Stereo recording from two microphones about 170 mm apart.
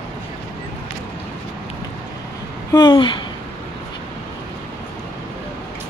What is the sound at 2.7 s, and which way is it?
Speech, 25° left (ahead or behind).